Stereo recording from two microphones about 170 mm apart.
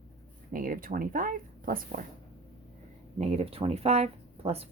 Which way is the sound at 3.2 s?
40° right (ahead or behind).